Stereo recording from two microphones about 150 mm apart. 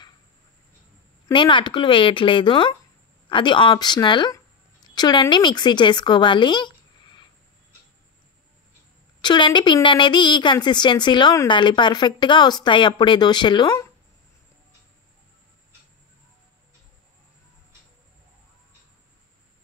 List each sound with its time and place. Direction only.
1.3 s a woman's voice: 35° left (ahead or behind)
9.2 s speech: 30° left (ahead or behind)